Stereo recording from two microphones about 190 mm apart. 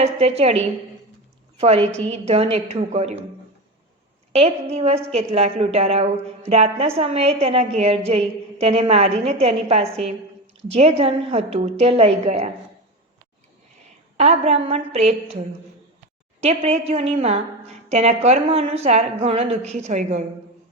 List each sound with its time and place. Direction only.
0.0 s a woman's voice: 35° right (ahead or behind)
1.6 s a woman's voice: 30° right (ahead or behind)
4.3 s a woman's voice: 35° right (ahead or behind)
14.2 s a woman's voice: 35° right (ahead or behind)